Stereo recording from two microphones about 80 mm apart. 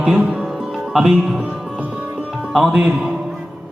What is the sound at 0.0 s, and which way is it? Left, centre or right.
Music, centre.